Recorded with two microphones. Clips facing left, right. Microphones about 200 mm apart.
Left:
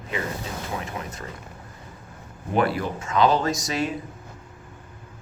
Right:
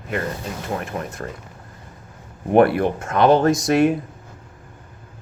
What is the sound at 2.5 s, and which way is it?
Speech, 60° right (ahead or behind).